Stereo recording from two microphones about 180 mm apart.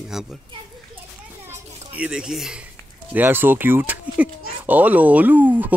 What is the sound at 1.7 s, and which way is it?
Children playing, 35° right (ahead or behind).